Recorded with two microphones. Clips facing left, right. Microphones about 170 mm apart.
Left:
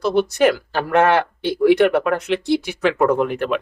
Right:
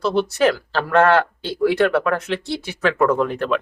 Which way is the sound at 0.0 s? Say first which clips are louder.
Left 2 dB; 10° left (ahead or behind).